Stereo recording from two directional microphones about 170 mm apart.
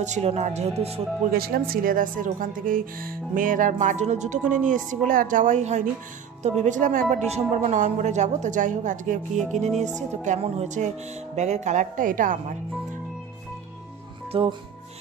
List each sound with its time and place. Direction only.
0.0 s speech: 40° right (ahead or behind)
1.3 s speech: 60° right (ahead or behind)
9.5 s music: 40° right (ahead or behind)
9.9 s speech: 45° right (ahead or behind)
14.3 s music: 35° right (ahead or behind)